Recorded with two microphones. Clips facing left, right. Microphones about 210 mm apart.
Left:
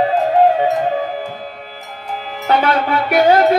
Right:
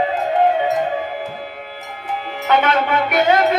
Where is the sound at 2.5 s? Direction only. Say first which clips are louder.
Left 1 dB; 35° left (ahead or behind).